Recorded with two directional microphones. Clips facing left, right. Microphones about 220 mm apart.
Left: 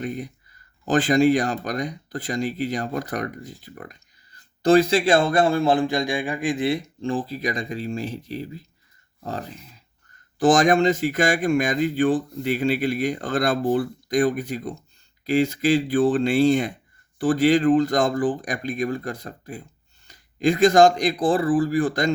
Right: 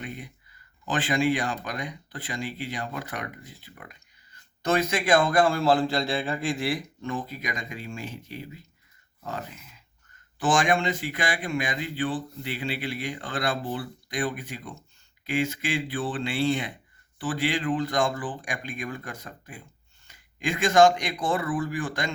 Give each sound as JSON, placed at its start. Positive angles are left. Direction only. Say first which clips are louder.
{"t": 0.0, "sound": "speech", "louder": "left 9 dB", "side_deg": 40}